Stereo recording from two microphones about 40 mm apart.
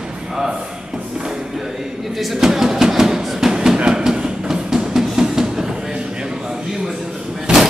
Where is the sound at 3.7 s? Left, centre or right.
Right.